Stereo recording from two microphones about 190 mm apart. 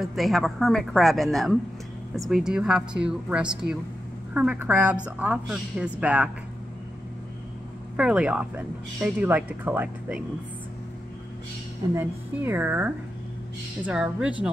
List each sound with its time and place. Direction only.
0.0 s a woman's voice: centre (ahead or behind)
7.9 s speech: 5° right (ahead or behind)
11.9 s a woman's voice: 10° right (ahead or behind)